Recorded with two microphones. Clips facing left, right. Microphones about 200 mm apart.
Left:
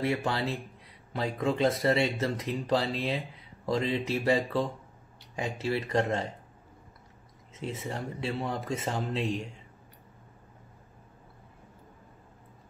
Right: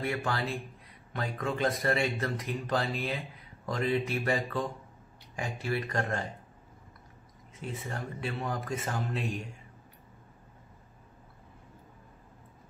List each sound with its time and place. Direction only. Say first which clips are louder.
0.0 s speech: left 3 dB; 25° left (ahead or behind)
7.9 s speech: left 2 dB; 25° left (ahead or behind)